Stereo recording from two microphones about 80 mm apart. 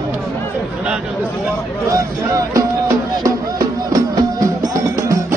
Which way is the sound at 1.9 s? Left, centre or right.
Right.